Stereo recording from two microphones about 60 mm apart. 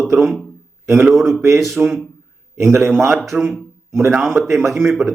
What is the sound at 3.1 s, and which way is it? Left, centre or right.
Speech, centre.